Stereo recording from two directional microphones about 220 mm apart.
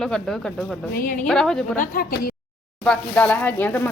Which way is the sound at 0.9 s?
40° left (ahead or behind).